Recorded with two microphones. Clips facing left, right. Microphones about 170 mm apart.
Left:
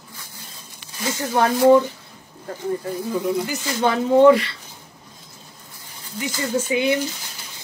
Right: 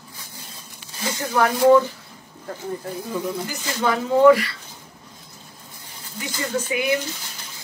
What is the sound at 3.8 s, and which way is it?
Speech, 20° left (ahead or behind).